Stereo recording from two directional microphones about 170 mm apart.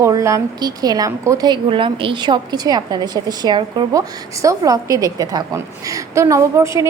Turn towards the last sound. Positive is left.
turn(degrees=-15)  # may be behind; listen again after turning